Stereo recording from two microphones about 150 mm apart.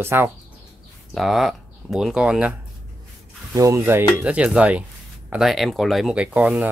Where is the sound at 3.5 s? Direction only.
20° right (ahead or behind).